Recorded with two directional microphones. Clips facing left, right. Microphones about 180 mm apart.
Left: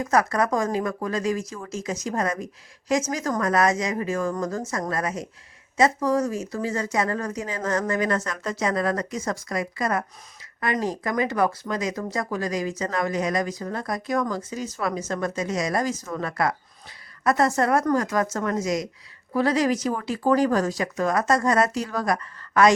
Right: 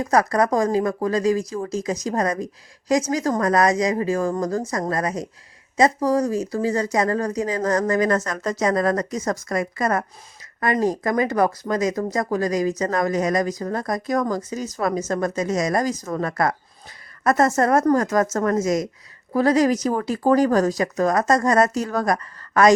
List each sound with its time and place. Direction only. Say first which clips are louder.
0.0 s speech: right 3 dB; 35° right (ahead or behind)